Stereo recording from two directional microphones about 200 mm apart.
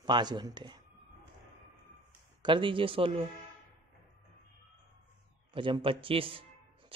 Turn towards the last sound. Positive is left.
turn(degrees=-25)  # may be behind; listen again after turning